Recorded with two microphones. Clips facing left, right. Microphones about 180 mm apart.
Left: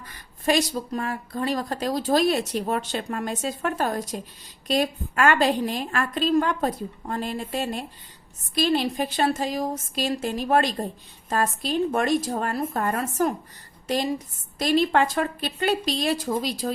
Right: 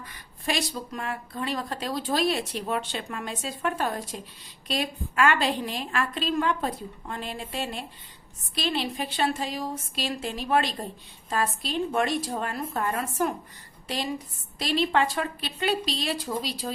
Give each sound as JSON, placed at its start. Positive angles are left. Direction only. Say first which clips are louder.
{"t": 0.1, "sound": "a woman's voice", "louder": "left 8 dB", "side_deg": 45}